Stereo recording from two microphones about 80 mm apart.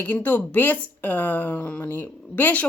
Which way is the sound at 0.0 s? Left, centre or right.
Left.